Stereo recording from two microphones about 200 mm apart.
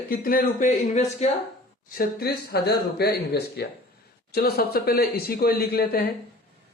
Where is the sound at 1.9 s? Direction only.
50° left (ahead or behind).